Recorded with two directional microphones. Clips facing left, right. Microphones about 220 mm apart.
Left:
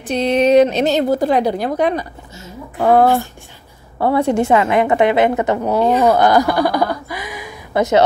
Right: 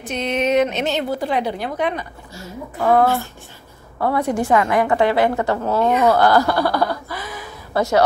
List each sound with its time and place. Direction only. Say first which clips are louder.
0.0 s a woman's voice: left 6 dB; 35° left (ahead or behind); by 5.8 s 20° left (ahead or behind)
5.8 s a woman's voice: left 3 dB; 30° left (ahead or behind)
6.0 s speech: left 1 dB; 20° left (ahead or behind)